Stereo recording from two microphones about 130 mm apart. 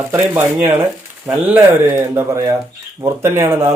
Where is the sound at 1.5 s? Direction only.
15° right (ahead or behind).